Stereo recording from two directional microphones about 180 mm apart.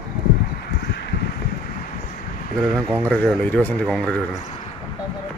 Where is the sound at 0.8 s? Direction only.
70° left (ahead or behind).